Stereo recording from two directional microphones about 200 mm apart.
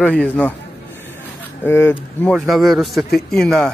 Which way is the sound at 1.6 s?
10° left (ahead or behind).